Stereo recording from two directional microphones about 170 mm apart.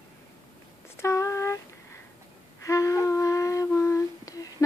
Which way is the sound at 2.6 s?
20° left (ahead or behind).